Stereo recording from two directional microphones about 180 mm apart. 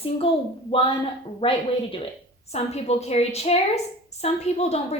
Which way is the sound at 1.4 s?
30° left (ahead or behind).